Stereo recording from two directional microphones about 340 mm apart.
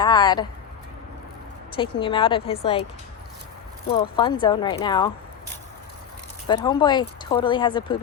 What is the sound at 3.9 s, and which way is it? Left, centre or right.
Speech, centre.